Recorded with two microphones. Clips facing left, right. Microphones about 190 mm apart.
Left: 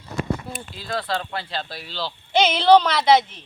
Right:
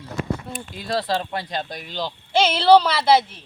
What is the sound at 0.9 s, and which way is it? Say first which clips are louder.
Speech: right 3 dB; 35° right (ahead or behind).